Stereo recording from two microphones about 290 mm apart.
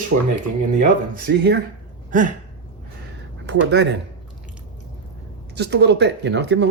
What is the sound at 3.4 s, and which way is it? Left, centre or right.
Speech, right.